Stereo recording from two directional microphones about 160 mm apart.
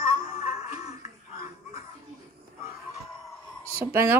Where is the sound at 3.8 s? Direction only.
15° right (ahead or behind).